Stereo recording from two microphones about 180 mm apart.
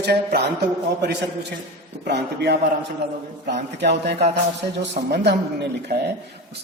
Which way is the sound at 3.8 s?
70° right (ahead or behind).